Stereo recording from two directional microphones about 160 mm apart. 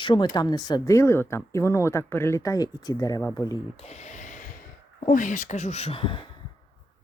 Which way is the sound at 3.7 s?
40° left (ahead or behind).